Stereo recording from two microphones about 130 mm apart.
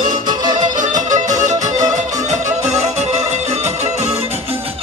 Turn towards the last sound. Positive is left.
turn(degrees=-55)  # may be behind; listen again after turning